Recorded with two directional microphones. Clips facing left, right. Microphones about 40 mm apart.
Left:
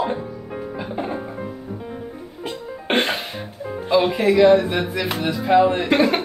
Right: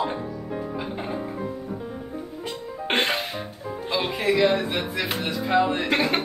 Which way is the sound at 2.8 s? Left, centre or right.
Centre.